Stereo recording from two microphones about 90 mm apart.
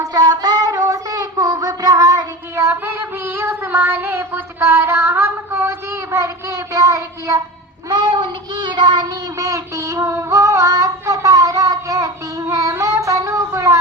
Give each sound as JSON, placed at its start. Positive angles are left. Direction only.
{"t": 0.0, "sound": "child singing", "side_deg": -50}
{"t": 2.6, "sound": "child singing", "side_deg": -25}
{"t": 7.9, "sound": "child singing", "side_deg": -50}